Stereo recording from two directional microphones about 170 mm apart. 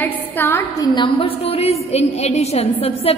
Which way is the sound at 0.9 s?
25° left (ahead or behind).